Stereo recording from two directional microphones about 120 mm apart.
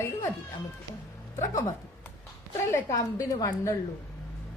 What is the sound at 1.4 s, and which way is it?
Speech, 25° left (ahead or behind).